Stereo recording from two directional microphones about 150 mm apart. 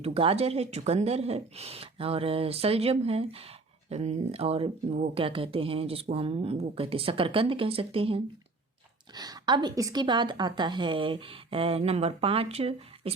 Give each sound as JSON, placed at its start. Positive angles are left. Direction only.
{"t": 0.0, "sound": "speech", "side_deg": -40}
{"t": 9.1, "sound": "speech", "side_deg": -25}